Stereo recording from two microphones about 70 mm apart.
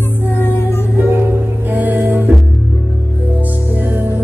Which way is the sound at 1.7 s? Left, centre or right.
Right.